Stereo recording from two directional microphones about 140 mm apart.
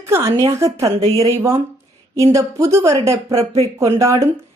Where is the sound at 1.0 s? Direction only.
50° right (ahead or behind).